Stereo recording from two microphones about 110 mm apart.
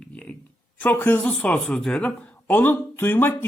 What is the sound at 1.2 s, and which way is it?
A woman's voice, 10° left (ahead or behind).